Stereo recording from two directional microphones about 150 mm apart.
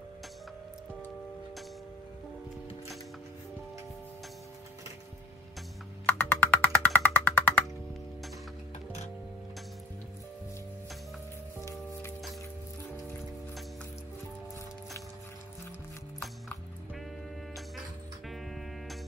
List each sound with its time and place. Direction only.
6.0 s music: 10° left (ahead or behind)
11.6 s music: 20° left (ahead or behind)
18.3 s music: centre (ahead or behind)